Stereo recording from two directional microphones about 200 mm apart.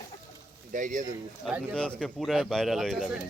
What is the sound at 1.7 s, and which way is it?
Speech, 5° left (ahead or behind).